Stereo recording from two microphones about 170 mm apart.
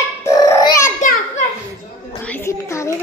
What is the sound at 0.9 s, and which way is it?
Children playing, 45° left (ahead or behind).